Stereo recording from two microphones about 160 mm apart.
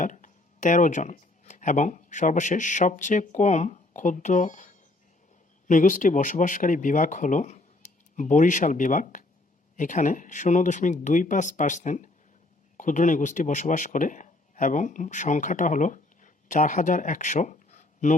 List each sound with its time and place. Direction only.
0.0 s speech: 55° left (ahead or behind)